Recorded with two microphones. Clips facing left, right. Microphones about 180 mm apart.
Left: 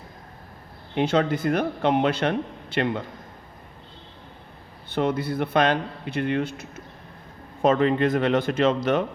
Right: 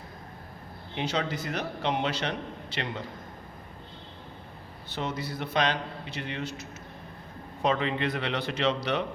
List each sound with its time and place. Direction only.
0.9 s a man's voice: 55° left (ahead or behind)
4.9 s a man's voice: 55° left (ahead or behind)